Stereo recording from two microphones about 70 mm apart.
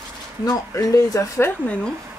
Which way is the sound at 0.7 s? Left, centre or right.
Left.